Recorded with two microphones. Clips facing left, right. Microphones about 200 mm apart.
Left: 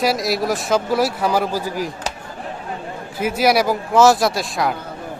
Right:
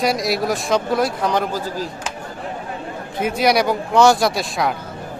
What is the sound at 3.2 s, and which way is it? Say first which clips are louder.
Speech: even; 5° left (ahead or behind).